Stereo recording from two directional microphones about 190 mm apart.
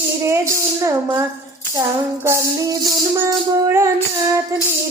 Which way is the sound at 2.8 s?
15° right (ahead or behind).